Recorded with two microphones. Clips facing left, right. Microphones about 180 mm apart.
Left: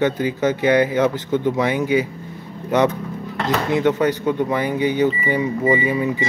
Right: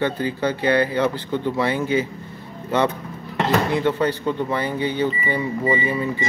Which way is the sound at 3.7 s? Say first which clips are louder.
Left 3 dB; 15° left (ahead or behind).